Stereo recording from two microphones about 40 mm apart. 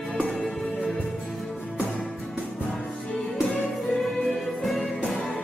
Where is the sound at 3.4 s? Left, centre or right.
Left.